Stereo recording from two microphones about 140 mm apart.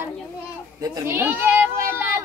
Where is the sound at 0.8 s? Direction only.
25° right (ahead or behind).